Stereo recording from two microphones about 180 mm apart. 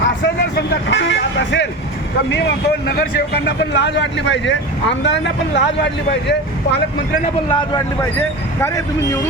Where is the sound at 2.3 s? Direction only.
70° left (ahead or behind).